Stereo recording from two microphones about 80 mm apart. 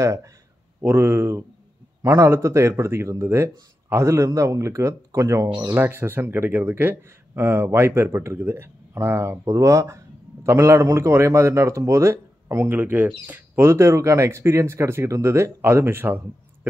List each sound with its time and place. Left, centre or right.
0.0 s a man's voice: right
5.8 s speech: right
9.4 s a man's voice: right
13.7 s a man's voice: right